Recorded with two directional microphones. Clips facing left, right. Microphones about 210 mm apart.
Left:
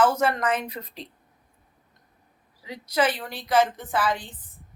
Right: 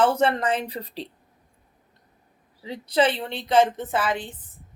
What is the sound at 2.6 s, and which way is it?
Speech, 30° right (ahead or behind).